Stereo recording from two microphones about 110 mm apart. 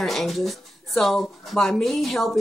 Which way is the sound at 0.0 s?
Centre (ahead or behind).